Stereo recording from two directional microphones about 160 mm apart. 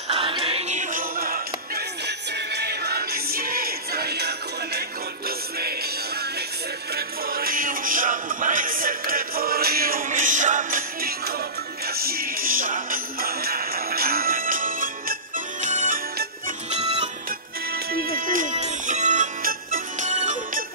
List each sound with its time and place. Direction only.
0.1 s music: 35° right (ahead or behind); by 1.4 s 65° right (ahead or behind)
2.0 s music: 90° right
7.0 s music: 65° right (ahead or behind); by 17.1 s 40° right (ahead or behind)
17.9 s music: 65° right (ahead or behind); by 20.6 s 45° right (ahead or behind)